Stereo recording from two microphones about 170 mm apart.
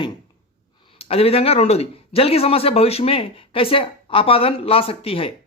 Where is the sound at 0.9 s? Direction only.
35° left (ahead or behind).